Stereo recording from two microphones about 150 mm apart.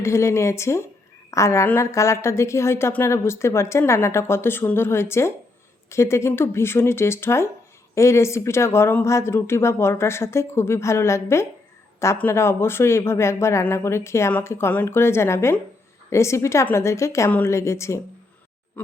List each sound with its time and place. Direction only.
0.0 s a woman's voice: 20° left (ahead or behind)